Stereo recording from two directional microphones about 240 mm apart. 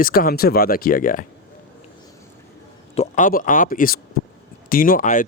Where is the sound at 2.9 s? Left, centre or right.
Left.